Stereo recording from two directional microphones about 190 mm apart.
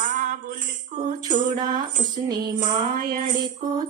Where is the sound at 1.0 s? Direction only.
25° right (ahead or behind).